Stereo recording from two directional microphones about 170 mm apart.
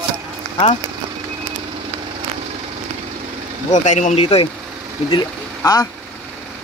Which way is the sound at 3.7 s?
45° left (ahead or behind).